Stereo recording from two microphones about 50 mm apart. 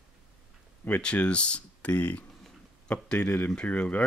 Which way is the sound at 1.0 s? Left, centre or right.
Left.